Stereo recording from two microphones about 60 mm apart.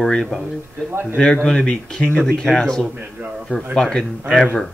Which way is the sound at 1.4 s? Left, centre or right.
Centre.